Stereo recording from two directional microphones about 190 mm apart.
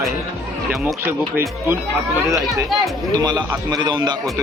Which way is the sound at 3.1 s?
20° right (ahead or behind).